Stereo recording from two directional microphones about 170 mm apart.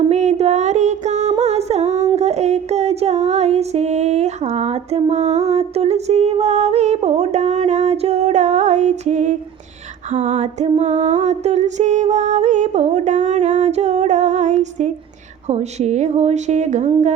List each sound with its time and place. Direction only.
0.1 s music: 40° right (ahead or behind)
15.4 s speech: 40° right (ahead or behind)